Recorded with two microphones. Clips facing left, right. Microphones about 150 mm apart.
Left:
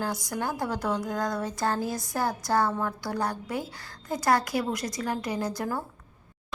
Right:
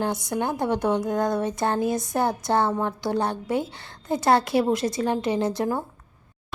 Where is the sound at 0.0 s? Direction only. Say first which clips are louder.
Right 5 dB; 25° right (ahead or behind).